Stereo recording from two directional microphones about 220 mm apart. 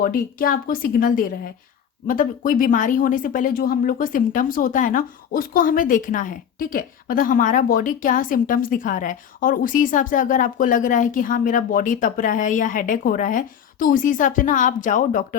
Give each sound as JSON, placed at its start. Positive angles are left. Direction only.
{"t": 0.0, "sound": "speech", "side_deg": 40}